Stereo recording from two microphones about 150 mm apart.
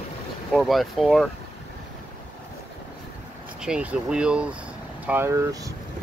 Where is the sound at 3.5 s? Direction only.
5° right (ahead or behind); by 5.7 s 20° right (ahead or behind).